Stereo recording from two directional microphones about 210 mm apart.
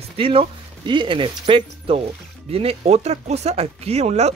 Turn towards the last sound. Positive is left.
turn(degrees=-30)  # may be behind; listen again after turning